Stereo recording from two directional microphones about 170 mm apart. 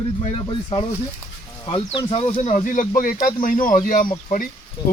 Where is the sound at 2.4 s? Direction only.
45° left (ahead or behind).